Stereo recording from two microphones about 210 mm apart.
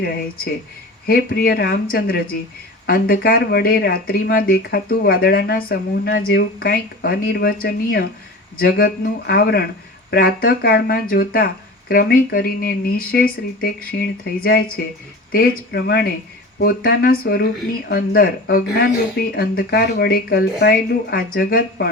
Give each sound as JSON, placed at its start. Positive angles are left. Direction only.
{"t": 0.0, "sound": "speech", "side_deg": 50}